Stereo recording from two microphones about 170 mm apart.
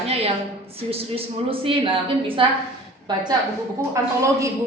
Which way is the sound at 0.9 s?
35° right (ahead or behind).